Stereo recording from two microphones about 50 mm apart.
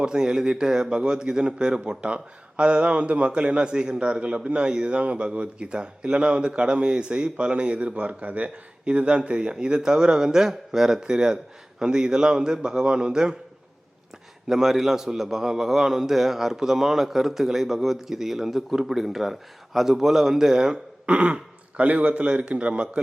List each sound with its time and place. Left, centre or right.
0.0 s a man's voice: centre
14.4 s a man's voice: centre
21.1 s speech: right